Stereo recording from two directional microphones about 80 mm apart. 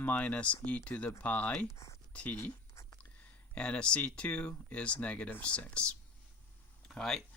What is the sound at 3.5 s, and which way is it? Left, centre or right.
Speech, centre.